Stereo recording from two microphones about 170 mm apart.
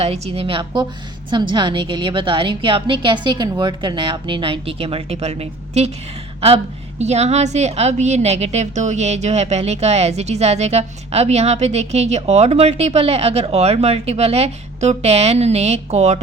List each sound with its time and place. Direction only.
0.0 s a woman's voice: 35° right (ahead or behind)
7.0 s a woman's voice: 40° right (ahead or behind)